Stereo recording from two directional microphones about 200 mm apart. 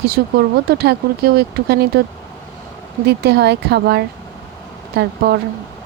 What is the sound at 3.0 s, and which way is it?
Speech, 55° right (ahead or behind).